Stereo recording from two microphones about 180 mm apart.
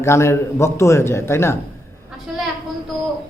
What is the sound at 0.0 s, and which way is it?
A man's voice, 15° left (ahead or behind).